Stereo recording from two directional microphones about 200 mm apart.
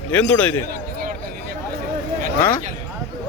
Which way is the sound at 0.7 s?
50° right (ahead or behind).